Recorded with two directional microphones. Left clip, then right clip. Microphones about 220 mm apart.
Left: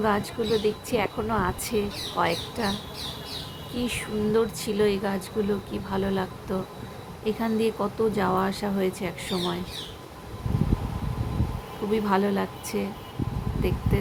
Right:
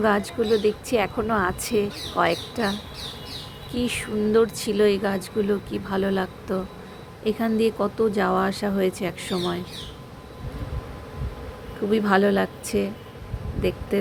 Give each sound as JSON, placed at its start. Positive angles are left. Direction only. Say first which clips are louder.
{"t": 0.0, "sound": "speech", "louder": "right 4 dB", "side_deg": -20}
{"t": 3.8, "sound": "speech", "louder": "right 3 dB", "side_deg": -20}
{"t": 11.9, "sound": "a woman's voice", "louder": "right 5 dB", "side_deg": -15}